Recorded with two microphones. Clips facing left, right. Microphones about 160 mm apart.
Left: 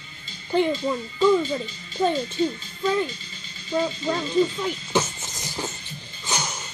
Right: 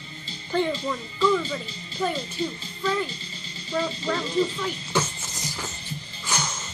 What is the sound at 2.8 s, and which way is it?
Speech, 20° left (ahead or behind).